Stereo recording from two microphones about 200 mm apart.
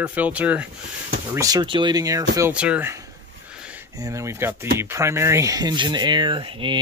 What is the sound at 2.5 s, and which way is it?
Speech, 5° right (ahead or behind).